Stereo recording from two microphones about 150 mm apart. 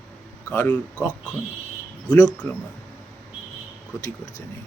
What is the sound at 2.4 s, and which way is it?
Speech, 15° left (ahead or behind).